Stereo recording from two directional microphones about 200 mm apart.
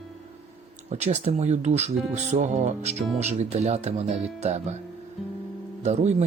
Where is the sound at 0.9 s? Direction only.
35° right (ahead or behind).